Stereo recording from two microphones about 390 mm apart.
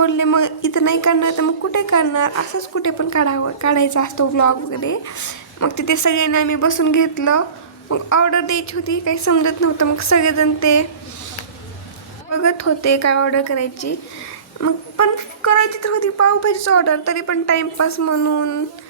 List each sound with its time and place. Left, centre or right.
0.0 s speech: left
12.3 s a woman's voice: left